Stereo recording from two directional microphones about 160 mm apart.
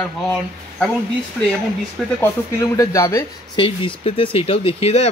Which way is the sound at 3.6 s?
35° left (ahead or behind).